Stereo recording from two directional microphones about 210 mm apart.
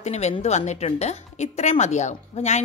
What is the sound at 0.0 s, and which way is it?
A woman's voice, 30° left (ahead or behind).